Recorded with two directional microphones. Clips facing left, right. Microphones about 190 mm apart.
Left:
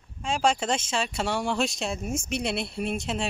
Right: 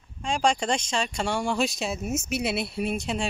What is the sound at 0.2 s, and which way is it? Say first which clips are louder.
Speech: even; 5° left (ahead or behind).